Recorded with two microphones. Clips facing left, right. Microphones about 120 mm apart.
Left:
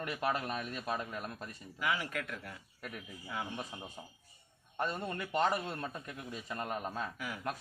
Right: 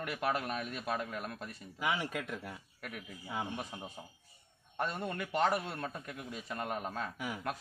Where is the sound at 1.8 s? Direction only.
25° right (ahead or behind).